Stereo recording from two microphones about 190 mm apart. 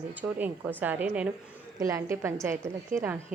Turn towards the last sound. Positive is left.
turn(degrees=-45)  # may be behind; listen again after turning